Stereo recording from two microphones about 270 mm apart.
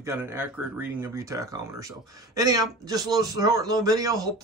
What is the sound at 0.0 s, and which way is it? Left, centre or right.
Speech, centre.